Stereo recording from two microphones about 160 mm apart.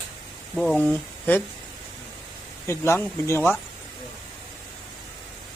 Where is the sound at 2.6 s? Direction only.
15° left (ahead or behind).